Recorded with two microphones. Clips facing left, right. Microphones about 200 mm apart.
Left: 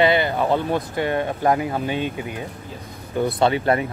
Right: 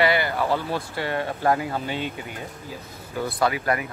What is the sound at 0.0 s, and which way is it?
Speech, 20° left (ahead or behind).